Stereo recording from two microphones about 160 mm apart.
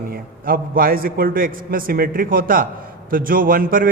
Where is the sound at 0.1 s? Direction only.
65° right (ahead or behind).